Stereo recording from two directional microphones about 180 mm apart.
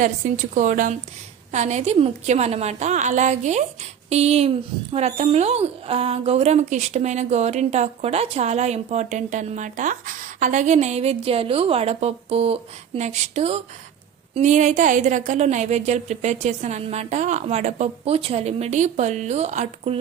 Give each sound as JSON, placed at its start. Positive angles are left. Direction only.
{"t": 0.5, "sound": "a woman's voice", "side_deg": -45}